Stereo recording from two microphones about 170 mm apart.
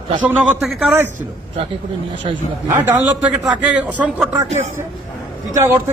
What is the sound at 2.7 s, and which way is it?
A man's voice, 10° right (ahead or behind).